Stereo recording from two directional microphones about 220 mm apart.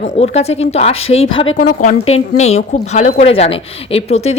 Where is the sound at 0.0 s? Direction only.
30° left (ahead or behind).